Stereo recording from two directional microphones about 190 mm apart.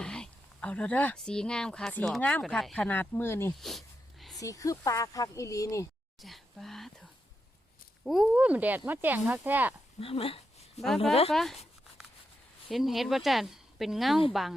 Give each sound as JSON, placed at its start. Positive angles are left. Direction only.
{"t": 0.0, "sound": "speech", "side_deg": 5}
{"t": 3.6, "sound": "a sound", "side_deg": 0}
{"t": 4.4, "sound": "speech", "side_deg": 15}
{"t": 6.2, "sound": "whispering", "side_deg": 0}
{"t": 8.0, "sound": "speech", "side_deg": 0}
{"t": 10.0, "sound": "speech", "side_deg": 30}
{"t": 10.8, "sound": "speech", "side_deg": 0}
{"t": 12.6, "sound": "speech", "side_deg": 0}